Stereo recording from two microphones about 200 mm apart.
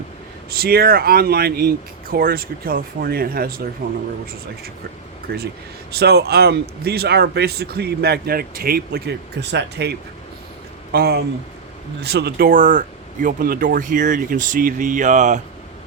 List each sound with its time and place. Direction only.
0.5 s a man's voice: 50° right (ahead or behind)
5.3 s a man's voice: 55° right (ahead or behind)
10.9 s a man's voice: 50° right (ahead or behind)